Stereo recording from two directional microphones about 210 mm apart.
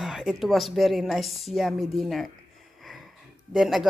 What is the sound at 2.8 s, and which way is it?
Snort, centre (ahead or behind).